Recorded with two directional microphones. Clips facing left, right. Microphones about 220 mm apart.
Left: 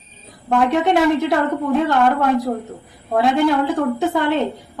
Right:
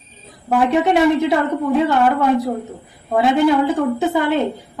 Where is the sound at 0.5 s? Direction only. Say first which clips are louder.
Right 1 dB; 5° right (ahead or behind).